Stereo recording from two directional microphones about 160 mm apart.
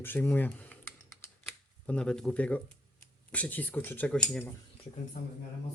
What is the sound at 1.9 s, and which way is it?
Speech, 5° left (ahead or behind).